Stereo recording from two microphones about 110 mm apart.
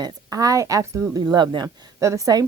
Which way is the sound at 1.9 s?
30° right (ahead or behind).